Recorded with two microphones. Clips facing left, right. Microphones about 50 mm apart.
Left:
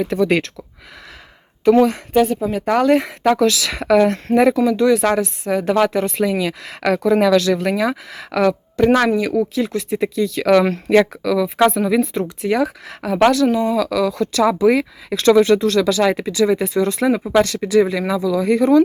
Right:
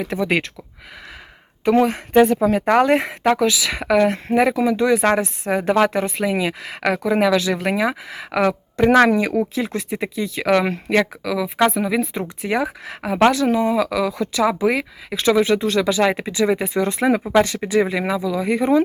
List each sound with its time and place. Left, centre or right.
0.0 s speech: centre
1.6 s speech: right
2.1 s a woman's voice: right
2.8 s speech: right
3.3 s speech: centre; by 6.6 s right
6.6 s speech: centre
9.0 s speech: right; by 12.2 s centre
12.4 s speech: right